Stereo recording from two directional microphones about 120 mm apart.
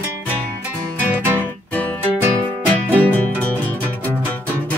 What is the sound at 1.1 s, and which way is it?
Music, 20° right (ahead or behind).